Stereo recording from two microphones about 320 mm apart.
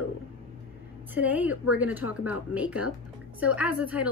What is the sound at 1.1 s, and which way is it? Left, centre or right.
A woman's voice, centre.